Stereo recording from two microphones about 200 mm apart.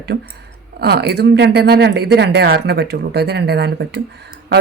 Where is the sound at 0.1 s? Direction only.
50° right (ahead or behind).